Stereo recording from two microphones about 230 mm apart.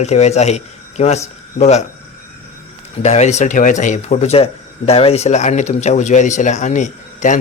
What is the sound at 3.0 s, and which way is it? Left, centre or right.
Speech, left.